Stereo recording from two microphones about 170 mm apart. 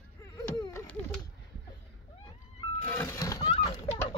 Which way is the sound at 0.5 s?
25° left (ahead or behind).